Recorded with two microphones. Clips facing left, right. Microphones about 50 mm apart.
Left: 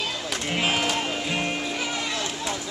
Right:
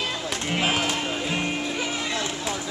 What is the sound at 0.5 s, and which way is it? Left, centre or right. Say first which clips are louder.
Music: even; centre.